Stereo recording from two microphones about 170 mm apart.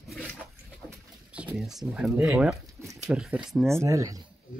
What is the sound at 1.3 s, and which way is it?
Speech, 5° right (ahead or behind).